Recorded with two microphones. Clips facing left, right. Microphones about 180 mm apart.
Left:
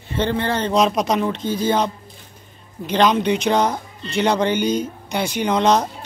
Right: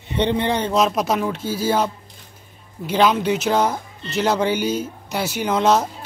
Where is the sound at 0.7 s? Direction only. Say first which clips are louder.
Left 4 dB; 5° right (ahead or behind).